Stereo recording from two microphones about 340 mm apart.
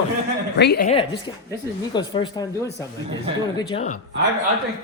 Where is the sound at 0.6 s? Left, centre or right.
Left.